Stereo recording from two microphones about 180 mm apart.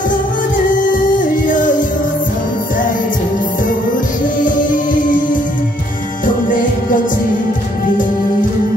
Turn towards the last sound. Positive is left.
turn(degrees=50)  # may be behind; listen again after turning